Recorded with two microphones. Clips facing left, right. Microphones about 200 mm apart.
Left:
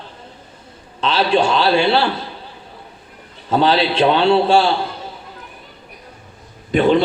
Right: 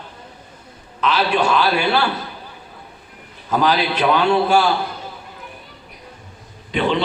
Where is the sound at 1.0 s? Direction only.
30° left (ahead or behind).